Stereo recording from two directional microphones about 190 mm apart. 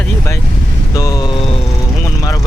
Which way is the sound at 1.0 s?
20° left (ahead or behind).